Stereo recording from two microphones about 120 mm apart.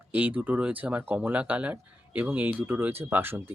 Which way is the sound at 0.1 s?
15° right (ahead or behind).